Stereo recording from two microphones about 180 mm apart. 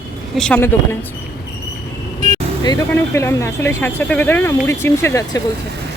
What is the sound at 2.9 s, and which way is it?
Speech, 15° left (ahead or behind).